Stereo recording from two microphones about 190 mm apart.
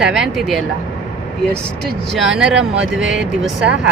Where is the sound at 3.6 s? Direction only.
65° right (ahead or behind).